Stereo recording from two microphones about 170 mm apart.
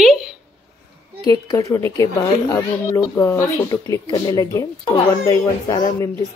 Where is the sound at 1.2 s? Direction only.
20° left (ahead or behind).